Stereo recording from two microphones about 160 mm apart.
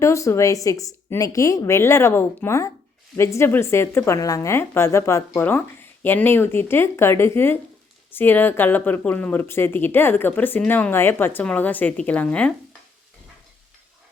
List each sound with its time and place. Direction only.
0.0 s a woman's voice: 20° left (ahead or behind)